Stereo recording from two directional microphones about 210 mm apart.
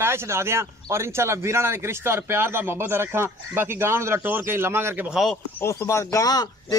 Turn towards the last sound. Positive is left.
turn(degrees=15)  # may be behind; listen again after turning